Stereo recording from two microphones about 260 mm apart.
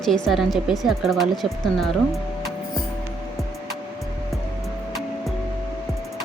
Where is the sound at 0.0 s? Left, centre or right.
Centre.